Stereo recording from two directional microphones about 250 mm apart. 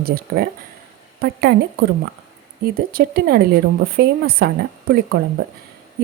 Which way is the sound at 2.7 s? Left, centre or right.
Right.